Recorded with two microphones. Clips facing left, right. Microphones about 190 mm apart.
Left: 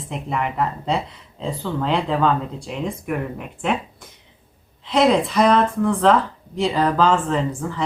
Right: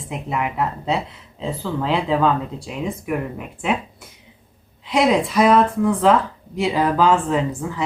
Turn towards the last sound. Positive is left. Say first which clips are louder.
# right 1 dB
turn(degrees=-5)  # may be behind; listen again after turning